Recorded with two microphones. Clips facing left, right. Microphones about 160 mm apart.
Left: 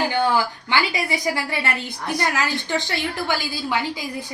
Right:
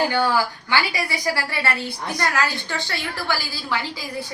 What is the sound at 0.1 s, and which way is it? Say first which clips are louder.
A woman's voice: even; 20° left (ahead or behind).